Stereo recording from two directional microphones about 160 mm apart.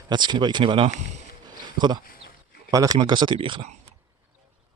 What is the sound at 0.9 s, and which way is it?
Speech, 45° right (ahead or behind).